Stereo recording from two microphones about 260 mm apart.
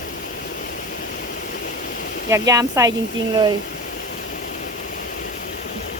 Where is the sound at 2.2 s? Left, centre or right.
Centre.